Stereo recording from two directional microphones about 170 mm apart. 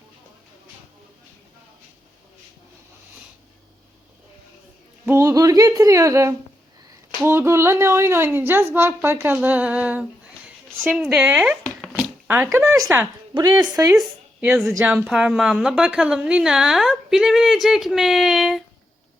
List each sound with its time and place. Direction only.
5.0 s speech: 15° right (ahead or behind)
11.6 s a sound: centre (ahead or behind)
12.3 s speech: 10° right (ahead or behind)
14.4 s a woman's voice: 5° right (ahead or behind)